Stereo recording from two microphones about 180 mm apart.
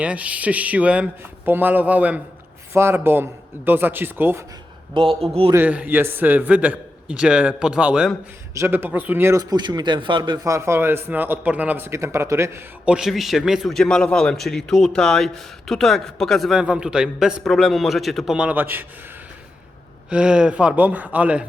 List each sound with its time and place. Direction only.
0.0 s a man's voice: 5° right (ahead or behind)
4.9 s a man's voice: 30° right (ahead or behind)
5.5 s a man's voice: 10° right (ahead or behind)
20.1 s a man's voice: 5° right (ahead or behind)